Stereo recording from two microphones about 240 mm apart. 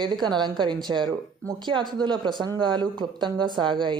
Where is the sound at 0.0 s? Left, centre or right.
Centre.